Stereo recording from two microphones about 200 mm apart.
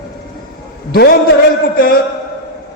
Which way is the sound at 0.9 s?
50° left (ahead or behind).